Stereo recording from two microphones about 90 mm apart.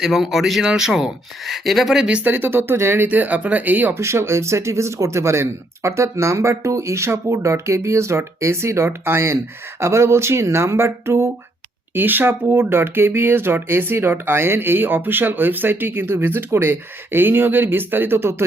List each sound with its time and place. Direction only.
0.0 s speech: centre (ahead or behind)
2.0 s speech: 15° right (ahead or behind)
4.0 s speech: 30° right (ahead or behind)